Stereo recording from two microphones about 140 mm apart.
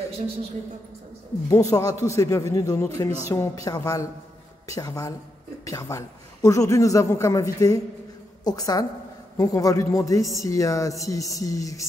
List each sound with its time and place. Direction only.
1.5 s a woman's voice: 25° left (ahead or behind)